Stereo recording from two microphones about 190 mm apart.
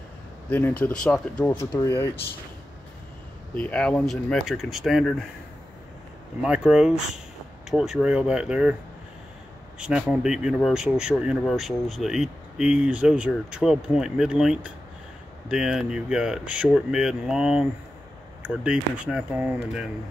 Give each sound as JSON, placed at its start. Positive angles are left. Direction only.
{"t": 0.5, "sound": "speech", "side_deg": 10}
{"t": 1.7, "sound": "speech", "side_deg": 25}
{"t": 3.5, "sound": "speech", "side_deg": 5}
{"t": 6.4, "sound": "speech", "side_deg": -5}
{"t": 9.8, "sound": "speech", "side_deg": -5}